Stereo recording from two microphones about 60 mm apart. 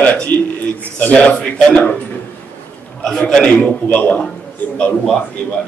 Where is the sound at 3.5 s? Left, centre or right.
Left.